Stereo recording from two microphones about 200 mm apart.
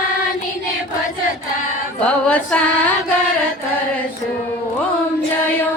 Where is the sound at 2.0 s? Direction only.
5° left (ahead or behind).